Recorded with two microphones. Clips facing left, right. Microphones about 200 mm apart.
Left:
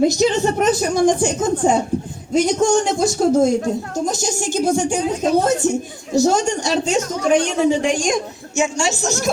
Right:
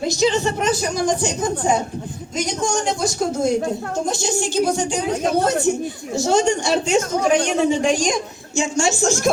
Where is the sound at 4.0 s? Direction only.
45° left (ahead or behind).